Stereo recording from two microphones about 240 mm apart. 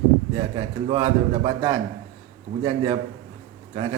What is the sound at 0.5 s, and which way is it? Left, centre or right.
A man's voice, centre.